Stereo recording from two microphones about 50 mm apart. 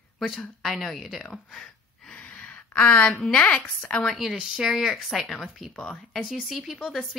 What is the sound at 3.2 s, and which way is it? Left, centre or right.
Speech, centre.